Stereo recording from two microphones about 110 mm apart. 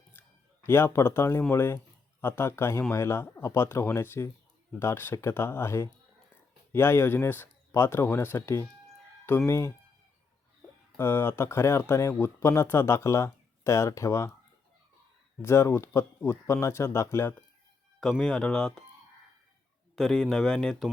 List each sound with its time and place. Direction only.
0.1 s speech: 20° left (ahead or behind)
10.9 s speech: 20° left (ahead or behind)
15.4 s speech: 25° left (ahead or behind)
18.0 s speech: 5° left (ahead or behind)
20.0 s speech: 5° left (ahead or behind)